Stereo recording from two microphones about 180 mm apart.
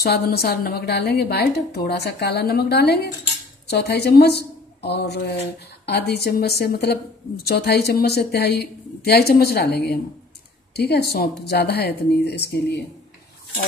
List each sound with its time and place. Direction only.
0.0 s a woman's voice: 60° left (ahead or behind)